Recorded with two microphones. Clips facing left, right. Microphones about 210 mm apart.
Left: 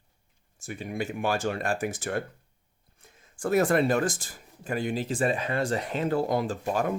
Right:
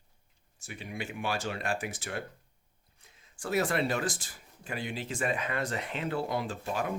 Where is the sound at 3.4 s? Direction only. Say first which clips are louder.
Left 6 dB; 50° left (ahead or behind).